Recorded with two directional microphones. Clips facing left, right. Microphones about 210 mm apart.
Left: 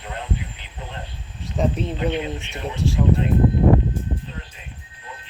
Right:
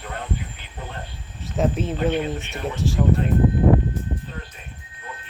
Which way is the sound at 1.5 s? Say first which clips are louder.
Right 1 dB; 5° right (ahead or behind).